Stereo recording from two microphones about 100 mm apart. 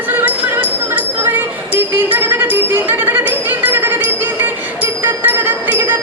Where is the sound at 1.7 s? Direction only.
20° right (ahead or behind).